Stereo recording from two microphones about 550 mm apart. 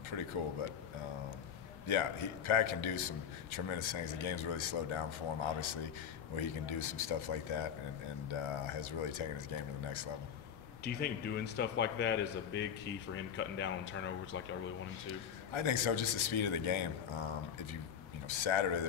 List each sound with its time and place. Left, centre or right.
0.1 s a man's voice: left
1.9 s a man's voice: left
10.8 s a man's voice: centre
15.5 s a man's voice: left
18.3 s a man's voice: left